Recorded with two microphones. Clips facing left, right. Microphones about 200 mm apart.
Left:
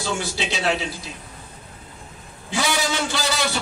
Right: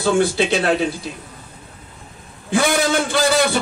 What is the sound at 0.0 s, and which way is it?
Speech, 55° right (ahead or behind).